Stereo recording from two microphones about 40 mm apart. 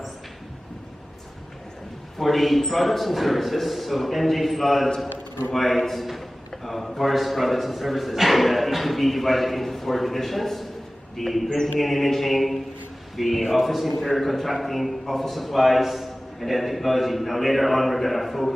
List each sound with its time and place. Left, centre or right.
2.1 s a man's voice: centre